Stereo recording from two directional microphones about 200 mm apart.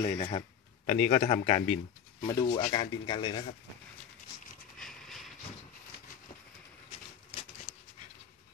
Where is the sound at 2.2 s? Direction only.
20° left (ahead or behind).